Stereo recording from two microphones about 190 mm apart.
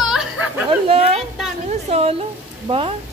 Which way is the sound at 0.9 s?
30° right (ahead or behind).